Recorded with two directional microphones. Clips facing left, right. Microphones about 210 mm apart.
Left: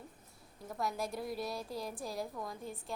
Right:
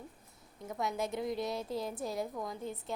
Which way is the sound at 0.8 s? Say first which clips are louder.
Right 3 dB; 20° right (ahead or behind).